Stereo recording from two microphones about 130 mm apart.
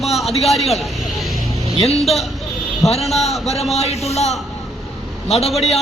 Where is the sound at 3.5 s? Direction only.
55° left (ahead or behind).